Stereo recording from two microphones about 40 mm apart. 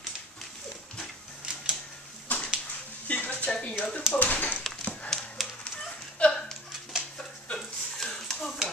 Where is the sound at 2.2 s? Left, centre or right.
Left.